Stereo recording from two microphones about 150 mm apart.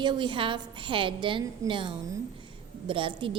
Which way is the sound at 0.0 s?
30° right (ahead or behind).